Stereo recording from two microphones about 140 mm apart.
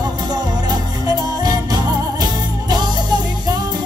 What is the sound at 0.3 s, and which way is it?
Music, 25° right (ahead or behind).